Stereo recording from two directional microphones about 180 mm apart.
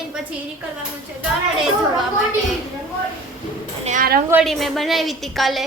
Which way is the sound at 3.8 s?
50° right (ahead or behind).